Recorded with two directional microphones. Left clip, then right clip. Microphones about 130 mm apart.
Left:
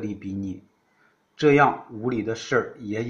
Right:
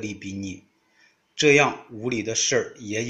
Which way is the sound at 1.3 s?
50° right (ahead or behind).